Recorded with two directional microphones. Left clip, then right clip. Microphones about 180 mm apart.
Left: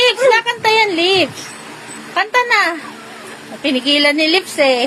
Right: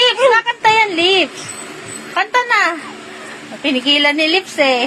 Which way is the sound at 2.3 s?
25° left (ahead or behind).